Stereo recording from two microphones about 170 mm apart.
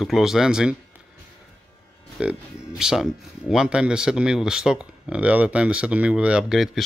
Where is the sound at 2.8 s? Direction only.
5° right (ahead or behind).